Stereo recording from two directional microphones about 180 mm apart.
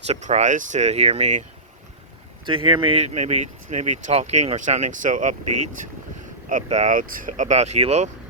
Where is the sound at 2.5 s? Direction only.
30° right (ahead or behind).